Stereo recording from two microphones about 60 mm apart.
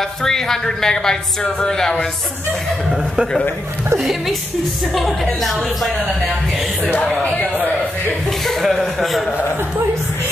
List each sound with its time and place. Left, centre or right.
0.2 s speech: centre
4.0 s speech: centre
7.0 s speech: centre
8.5 s speech: centre